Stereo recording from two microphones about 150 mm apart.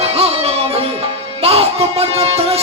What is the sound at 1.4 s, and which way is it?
Music, 40° right (ahead or behind).